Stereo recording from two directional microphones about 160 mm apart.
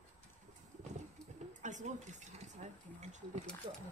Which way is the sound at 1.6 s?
50° right (ahead or behind).